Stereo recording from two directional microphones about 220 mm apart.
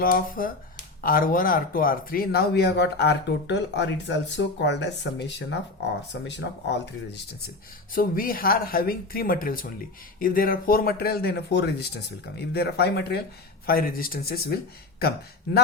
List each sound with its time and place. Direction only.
0.0 s speech: 40° left (ahead or behind)
7.9 s speech: 40° left (ahead or behind)